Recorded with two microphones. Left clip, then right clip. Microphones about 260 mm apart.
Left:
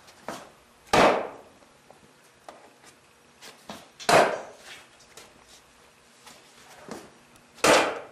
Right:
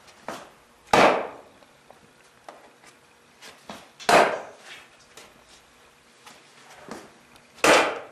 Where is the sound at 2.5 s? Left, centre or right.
Centre.